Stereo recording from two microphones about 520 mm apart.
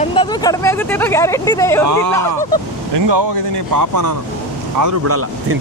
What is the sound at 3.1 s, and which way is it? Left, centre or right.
Speech, right.